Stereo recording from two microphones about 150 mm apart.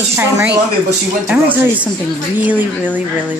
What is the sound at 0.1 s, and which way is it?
Speech, 10° right (ahead or behind).